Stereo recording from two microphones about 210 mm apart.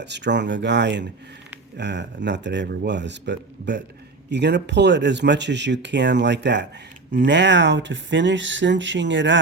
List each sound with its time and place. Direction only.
0.0 s speech: 55° right (ahead or behind)